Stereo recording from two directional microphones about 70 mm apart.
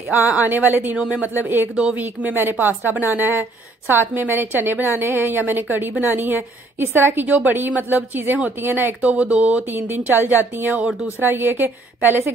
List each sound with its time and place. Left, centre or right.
0.4 s a woman's voice: right
0.9 s speech: centre
1.2 s a woman's voice: right
9.1 s a woman's voice: centre
9.7 s a woman's voice: right